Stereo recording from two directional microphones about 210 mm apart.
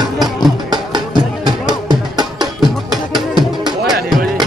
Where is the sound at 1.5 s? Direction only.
20° right (ahead or behind).